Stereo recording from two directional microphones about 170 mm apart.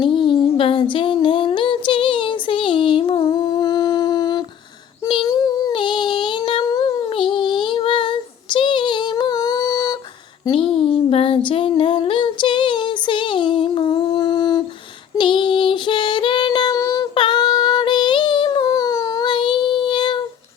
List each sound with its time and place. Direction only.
0.0 s a sound: 30° left (ahead or behind)
5.0 s child singing: 25° left (ahead or behind)
10.4 s female singing: 30° left (ahead or behind)
15.1 s child singing: 25° left (ahead or behind)